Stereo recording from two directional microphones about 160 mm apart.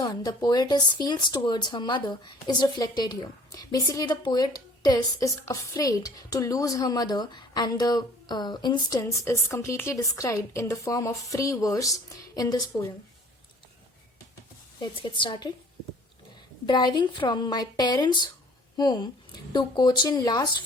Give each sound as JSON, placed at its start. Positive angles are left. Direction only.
{"t": 0.0, "sound": "speech", "side_deg": 25}
{"t": 14.8, "sound": "a woman's voice", "side_deg": 30}
{"t": 16.6, "sound": "speech", "side_deg": 25}